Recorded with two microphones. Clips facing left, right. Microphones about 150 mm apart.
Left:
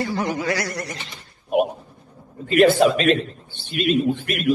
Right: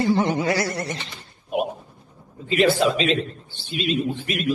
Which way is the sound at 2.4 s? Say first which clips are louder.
Left 4 dB; 55° left (ahead or behind).